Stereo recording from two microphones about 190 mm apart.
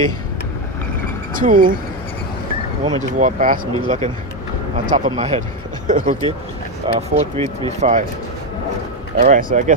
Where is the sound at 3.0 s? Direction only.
40° right (ahead or behind).